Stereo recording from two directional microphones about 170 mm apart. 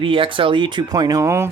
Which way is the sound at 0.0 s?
30° right (ahead or behind).